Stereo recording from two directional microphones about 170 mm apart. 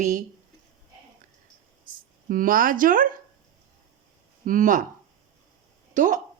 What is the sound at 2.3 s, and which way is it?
Speech, 55° right (ahead or behind).